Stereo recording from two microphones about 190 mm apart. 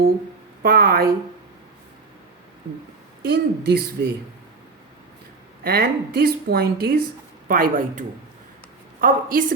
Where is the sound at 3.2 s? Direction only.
55° right (ahead or behind).